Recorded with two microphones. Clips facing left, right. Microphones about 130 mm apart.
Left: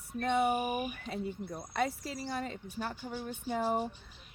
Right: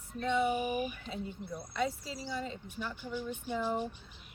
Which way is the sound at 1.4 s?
50° left (ahead or behind).